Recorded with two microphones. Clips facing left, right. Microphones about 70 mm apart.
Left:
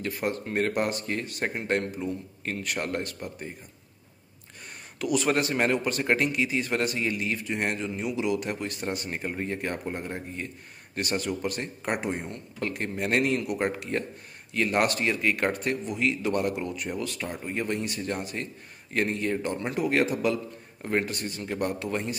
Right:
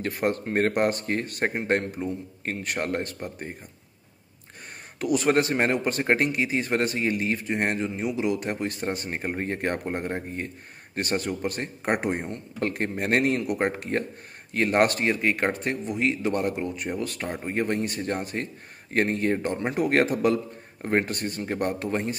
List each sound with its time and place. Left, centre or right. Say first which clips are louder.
0.0 s a man's voice: right 4 dB; right
4.9 s a man's voice: right 3 dB; right
19.8 s a man's voice: right 3 dB; right